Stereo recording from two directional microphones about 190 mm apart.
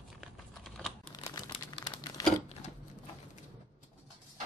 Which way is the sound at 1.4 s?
25° left (ahead or behind).